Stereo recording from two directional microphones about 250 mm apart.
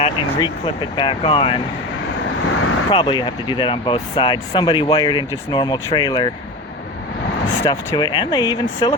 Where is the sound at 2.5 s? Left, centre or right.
Left.